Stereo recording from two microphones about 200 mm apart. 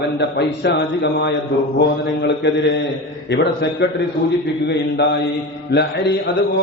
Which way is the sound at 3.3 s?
60° left (ahead or behind).